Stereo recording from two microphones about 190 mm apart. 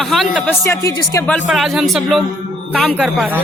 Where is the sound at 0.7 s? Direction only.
15° left (ahead or behind).